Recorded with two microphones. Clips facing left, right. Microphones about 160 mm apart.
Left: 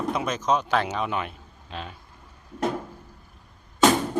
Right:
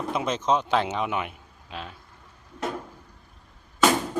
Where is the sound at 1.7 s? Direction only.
Centre (ahead or behind).